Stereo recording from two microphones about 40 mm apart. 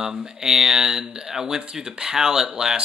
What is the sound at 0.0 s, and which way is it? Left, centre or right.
Speech, centre.